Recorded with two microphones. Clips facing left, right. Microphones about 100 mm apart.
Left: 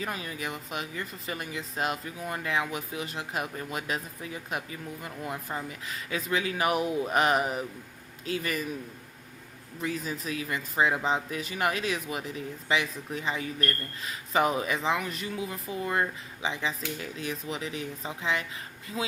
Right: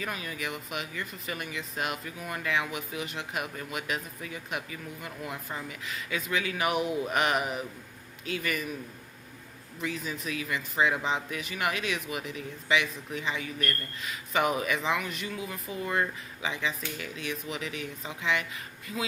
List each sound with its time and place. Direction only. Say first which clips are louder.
0.0 s speech: left 1 dB; 30° left (ahead or behind)
9.8 s speech: left 2 dB; 40° left (ahead or behind)